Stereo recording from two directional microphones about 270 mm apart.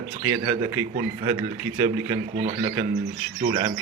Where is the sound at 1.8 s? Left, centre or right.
Right.